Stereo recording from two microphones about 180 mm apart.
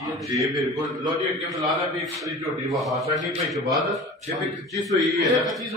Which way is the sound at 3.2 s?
Centre (ahead or behind).